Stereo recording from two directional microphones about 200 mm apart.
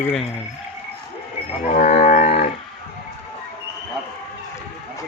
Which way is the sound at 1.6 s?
40° left (ahead or behind).